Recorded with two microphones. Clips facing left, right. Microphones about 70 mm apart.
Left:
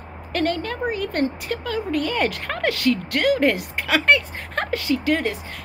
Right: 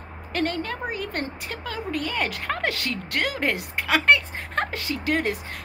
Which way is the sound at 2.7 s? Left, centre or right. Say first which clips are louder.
Left 8 dB; right.